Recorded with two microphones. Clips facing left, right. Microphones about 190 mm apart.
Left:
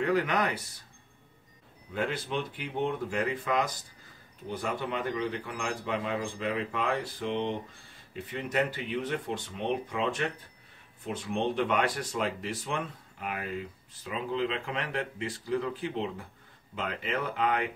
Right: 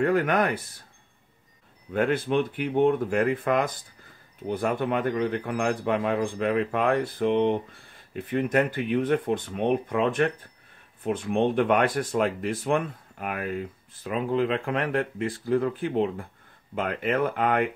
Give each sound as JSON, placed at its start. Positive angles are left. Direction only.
{"t": 0.0, "sound": "speech", "side_deg": -50}
{"t": 1.9, "sound": "speech", "side_deg": -55}